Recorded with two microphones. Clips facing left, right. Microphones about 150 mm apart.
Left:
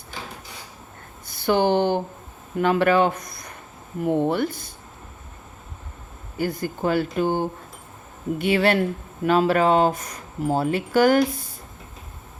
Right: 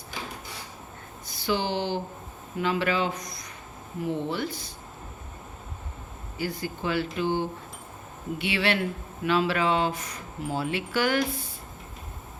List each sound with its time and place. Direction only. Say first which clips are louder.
1.3 s speech: left 8 dB; 55° left (ahead or behind)
6.3 s speech: left 6 dB; 50° left (ahead or behind)